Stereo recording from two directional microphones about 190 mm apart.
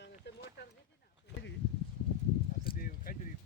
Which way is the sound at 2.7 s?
50° left (ahead or behind).